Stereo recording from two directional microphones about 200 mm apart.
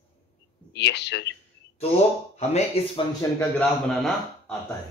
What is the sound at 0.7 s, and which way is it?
Speech, 60° left (ahead or behind).